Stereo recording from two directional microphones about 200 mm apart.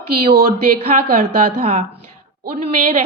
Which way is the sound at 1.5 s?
30° right (ahead or behind).